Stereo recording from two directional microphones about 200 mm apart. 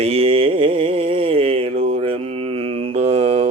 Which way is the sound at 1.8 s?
30° right (ahead or behind).